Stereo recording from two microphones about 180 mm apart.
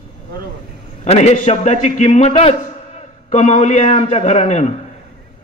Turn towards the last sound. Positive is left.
turn(degrees=40)  # may be behind; listen again after turning